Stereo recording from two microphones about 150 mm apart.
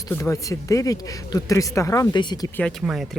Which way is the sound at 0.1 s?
20° left (ahead or behind).